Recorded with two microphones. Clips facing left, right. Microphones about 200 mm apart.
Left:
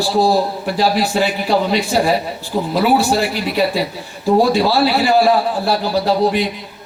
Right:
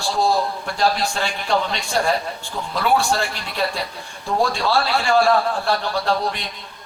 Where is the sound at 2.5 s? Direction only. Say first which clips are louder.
Left 11 dB; 20° left (ahead or behind).